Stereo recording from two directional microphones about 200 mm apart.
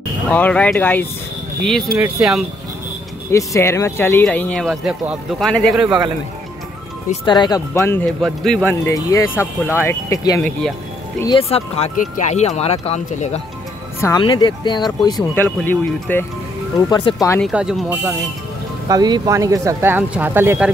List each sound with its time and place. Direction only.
0.3 s speech: 5° left (ahead or behind)
3.3 s speech: 15° left (ahead or behind)
7.2 s speech: 20° left (ahead or behind)
11.4 s speech: 30° left (ahead or behind)
14.0 s speech: 20° left (ahead or behind)
17.4 s speech: 5° right (ahead or behind)
18.9 s speech: 20° right (ahead or behind)